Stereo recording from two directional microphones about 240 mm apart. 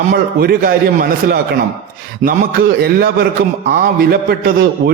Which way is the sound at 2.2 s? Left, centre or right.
Right.